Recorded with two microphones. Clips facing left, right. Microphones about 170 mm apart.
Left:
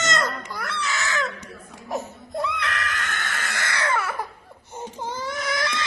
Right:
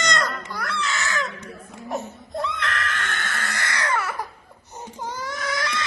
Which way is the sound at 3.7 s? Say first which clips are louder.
Left 1 dB; 10° right (ahead or behind).